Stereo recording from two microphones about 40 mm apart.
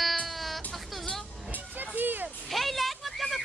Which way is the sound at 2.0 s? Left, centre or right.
Right.